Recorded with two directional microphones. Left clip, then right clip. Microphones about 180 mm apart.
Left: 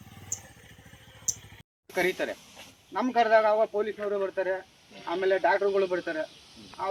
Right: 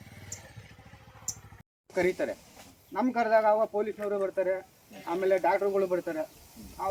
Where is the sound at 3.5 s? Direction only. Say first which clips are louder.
Left 2 dB; 40° right (ahead or behind).